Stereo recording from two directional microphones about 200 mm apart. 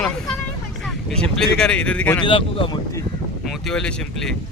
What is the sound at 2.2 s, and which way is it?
Speech, 25° left (ahead or behind).